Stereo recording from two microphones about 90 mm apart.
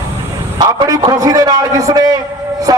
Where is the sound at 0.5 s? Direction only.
45° right (ahead or behind).